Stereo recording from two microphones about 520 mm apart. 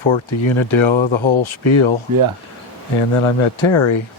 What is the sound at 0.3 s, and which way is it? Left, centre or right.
Speech, left.